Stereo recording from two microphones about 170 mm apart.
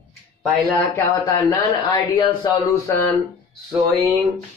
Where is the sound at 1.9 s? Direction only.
25° left (ahead or behind).